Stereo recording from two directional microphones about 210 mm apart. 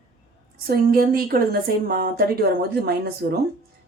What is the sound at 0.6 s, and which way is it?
A woman's voice, 45° right (ahead or behind).